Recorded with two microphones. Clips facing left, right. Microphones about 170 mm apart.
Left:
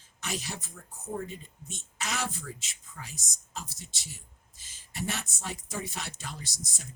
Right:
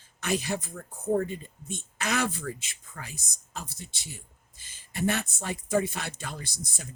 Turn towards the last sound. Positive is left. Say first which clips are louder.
# right 4 dB
turn(degrees=-55)  # may be behind; listen again after turning